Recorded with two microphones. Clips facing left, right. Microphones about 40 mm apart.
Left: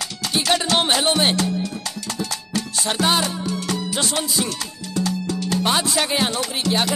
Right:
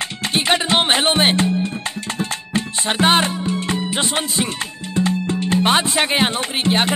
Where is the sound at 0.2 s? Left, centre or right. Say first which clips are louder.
Right 2 dB; right.